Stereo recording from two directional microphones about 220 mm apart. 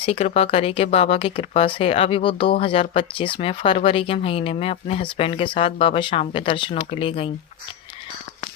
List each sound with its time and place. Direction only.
0.0 s speech: 25° left (ahead or behind)